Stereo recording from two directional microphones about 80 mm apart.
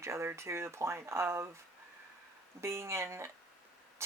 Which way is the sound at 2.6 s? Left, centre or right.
Right.